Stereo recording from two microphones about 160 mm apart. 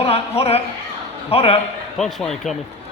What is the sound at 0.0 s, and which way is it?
A man's voice, 40° left (ahead or behind).